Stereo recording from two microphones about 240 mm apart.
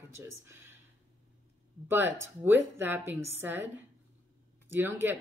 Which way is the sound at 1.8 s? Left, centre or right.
Centre.